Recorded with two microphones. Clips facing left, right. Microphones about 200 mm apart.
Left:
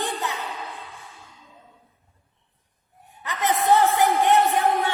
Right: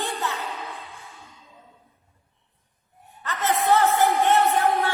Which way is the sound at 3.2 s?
15° left (ahead or behind).